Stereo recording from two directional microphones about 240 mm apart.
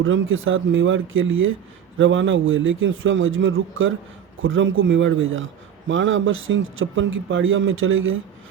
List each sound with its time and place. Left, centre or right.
0.0 s a man's voice: right